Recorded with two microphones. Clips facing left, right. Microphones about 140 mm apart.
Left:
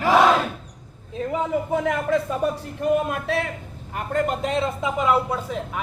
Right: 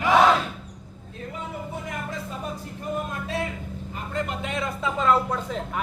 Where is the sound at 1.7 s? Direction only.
85° left; by 4.2 s 60° left (ahead or behind).